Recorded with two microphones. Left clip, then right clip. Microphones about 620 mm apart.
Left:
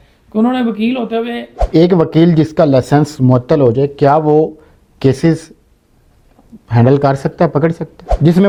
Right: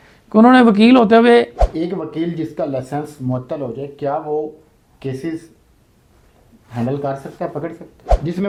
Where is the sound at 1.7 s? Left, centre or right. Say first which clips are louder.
Left 13 dB; left.